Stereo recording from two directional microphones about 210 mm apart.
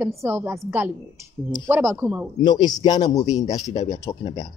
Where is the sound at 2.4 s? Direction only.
20° left (ahead or behind).